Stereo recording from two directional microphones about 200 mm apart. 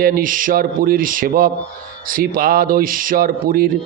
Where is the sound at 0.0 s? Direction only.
45° right (ahead or behind).